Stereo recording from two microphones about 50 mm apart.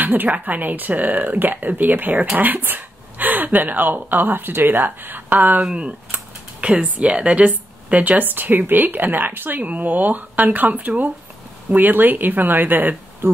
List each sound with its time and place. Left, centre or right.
0.0 s a woman's voice: right
5.6 s speech: right